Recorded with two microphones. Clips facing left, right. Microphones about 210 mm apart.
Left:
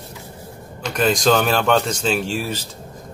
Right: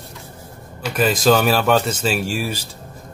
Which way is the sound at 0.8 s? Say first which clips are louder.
Right 1 dB; 5° right (ahead or behind).